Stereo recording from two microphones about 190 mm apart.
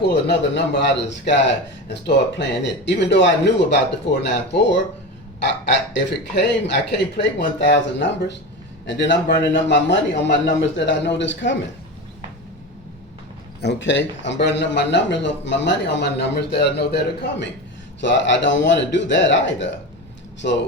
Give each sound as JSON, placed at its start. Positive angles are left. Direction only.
{"t": 0.1, "sound": "a man's voice", "side_deg": 60}
{"t": 13.6, "sound": "a man's voice", "side_deg": 65}
{"t": 18.0, "sound": "a man's voice", "side_deg": 70}